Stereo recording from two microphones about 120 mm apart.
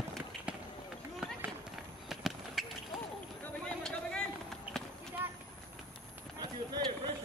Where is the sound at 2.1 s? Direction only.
Centre (ahead or behind).